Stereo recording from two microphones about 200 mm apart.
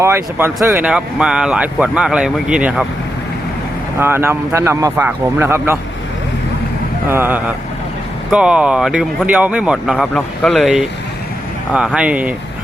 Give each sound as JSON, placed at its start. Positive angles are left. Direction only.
{"t": 0.0, "sound": "speech", "side_deg": -10}
{"t": 4.0, "sound": "a man's voice", "side_deg": -10}
{"t": 7.1, "sound": "a man's voice", "side_deg": -10}